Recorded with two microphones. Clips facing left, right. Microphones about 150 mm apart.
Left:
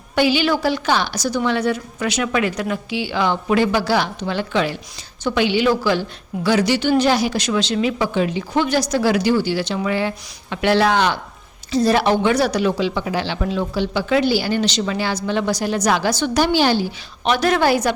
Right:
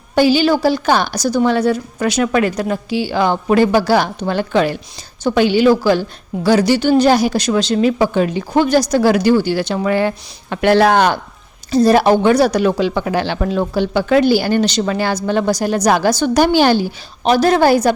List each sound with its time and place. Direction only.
0.2 s a woman's voice: 35° right (ahead or behind)
17.2 s a woman's voice: 35° right (ahead or behind)